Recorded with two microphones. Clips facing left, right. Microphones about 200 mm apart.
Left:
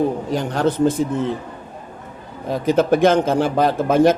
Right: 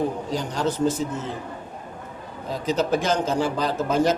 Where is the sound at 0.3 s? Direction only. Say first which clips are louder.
Left 6 dB; 60° left (ahead or behind).